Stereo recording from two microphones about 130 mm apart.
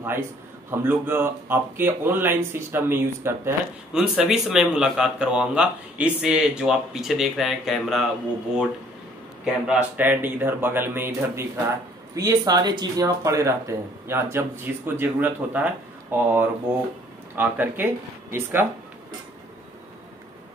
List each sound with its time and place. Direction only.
0.7 s speech: 15° right (ahead or behind)
3.9 s a man's voice: 5° right (ahead or behind)
9.4 s speech: 10° right (ahead or behind)